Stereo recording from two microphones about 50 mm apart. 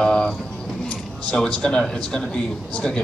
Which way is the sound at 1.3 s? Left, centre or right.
Centre.